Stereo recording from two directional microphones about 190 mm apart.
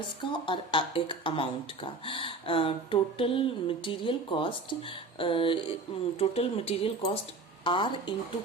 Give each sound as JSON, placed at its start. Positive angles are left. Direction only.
{"t": 0.2, "sound": "speech", "side_deg": 25}